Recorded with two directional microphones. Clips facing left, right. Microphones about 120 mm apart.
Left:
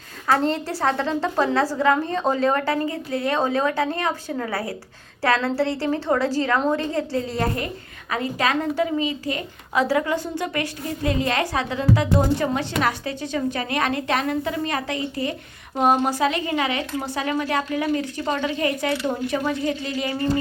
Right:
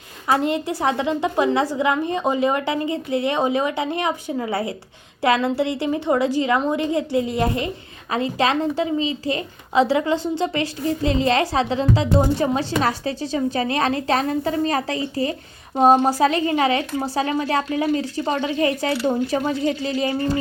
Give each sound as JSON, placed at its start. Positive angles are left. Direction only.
{"t": 0.3, "sound": "a woman's voice", "side_deg": -15}